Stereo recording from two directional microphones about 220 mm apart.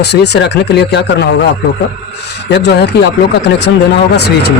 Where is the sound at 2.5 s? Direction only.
50° left (ahead or behind).